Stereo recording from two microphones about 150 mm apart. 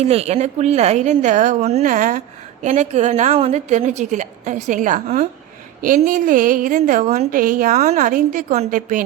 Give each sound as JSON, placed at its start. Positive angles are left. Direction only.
{"t": 0.0, "sound": "a woman's voice", "side_deg": -45}
{"t": 5.8, "sound": "a woman's voice", "side_deg": -65}